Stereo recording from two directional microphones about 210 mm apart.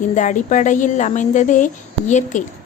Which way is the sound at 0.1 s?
35° left (ahead or behind).